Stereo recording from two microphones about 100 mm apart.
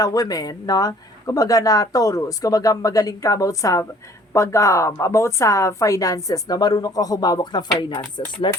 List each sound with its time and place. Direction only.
0.0 s speech: 40° left (ahead or behind)
7.8 s speech: 55° left (ahead or behind)